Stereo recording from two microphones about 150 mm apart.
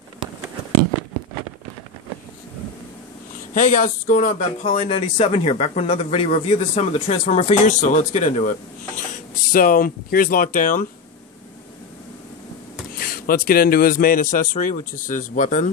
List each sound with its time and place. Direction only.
3.5 s speech: 60° left (ahead or behind)
12.9 s a man's voice: 75° left (ahead or behind); by 15.6 s 60° left (ahead or behind)